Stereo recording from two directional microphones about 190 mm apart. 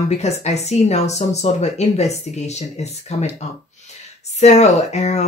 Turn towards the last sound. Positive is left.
turn(degrees=35)  # may be behind; listen again after turning